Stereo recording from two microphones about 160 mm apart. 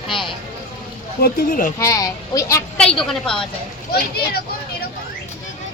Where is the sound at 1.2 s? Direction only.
65° left (ahead or behind).